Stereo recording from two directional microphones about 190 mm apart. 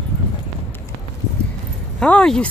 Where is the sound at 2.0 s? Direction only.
5° left (ahead or behind).